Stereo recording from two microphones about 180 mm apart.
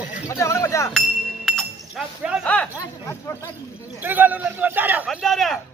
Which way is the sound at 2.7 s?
20° left (ahead or behind).